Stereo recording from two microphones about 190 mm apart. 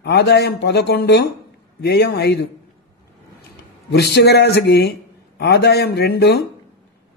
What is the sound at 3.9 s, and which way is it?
A man's voice, 60° left (ahead or behind).